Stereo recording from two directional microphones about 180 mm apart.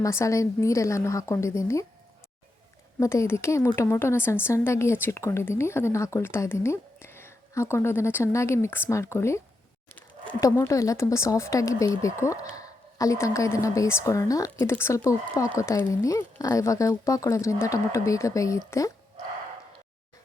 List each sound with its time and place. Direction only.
0.0 s speech: 15° left (ahead or behind)
3.0 s speech: 15° left (ahead or behind)